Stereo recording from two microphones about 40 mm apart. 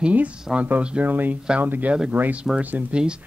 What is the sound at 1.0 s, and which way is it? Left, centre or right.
Speech, right.